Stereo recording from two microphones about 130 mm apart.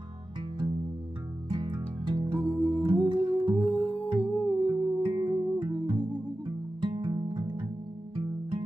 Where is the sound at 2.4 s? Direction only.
10° left (ahead or behind).